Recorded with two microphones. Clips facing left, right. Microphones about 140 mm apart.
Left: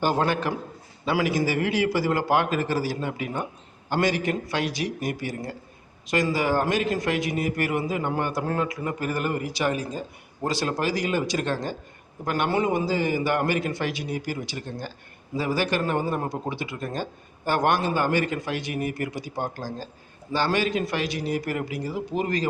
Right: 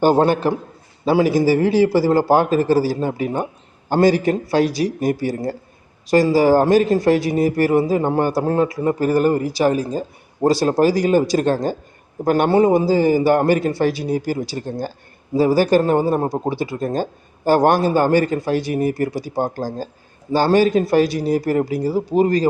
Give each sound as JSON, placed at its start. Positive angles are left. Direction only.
{"t": 0.0, "sound": "a man's voice", "side_deg": -35}